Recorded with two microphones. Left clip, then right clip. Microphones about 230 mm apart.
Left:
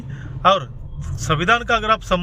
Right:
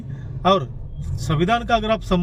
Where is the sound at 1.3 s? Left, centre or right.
Centre.